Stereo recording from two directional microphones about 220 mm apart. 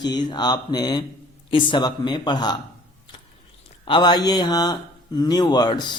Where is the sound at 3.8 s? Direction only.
20° left (ahead or behind).